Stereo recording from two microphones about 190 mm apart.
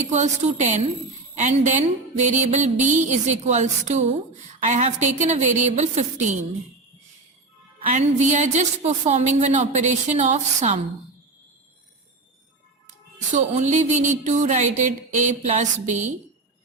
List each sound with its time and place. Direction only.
0.0 s a woman's voice: 40° right (ahead or behind)
7.8 s a woman's voice: 40° right (ahead or behind)
13.3 s a woman's voice: 40° right (ahead or behind)